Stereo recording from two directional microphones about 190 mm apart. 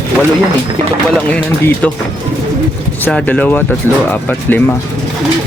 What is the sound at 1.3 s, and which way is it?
Speech, 5° left (ahead or behind).